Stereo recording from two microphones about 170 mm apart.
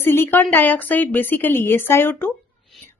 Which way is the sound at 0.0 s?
15° left (ahead or behind).